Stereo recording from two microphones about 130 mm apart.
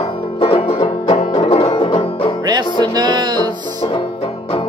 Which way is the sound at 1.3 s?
45° left (ahead or behind).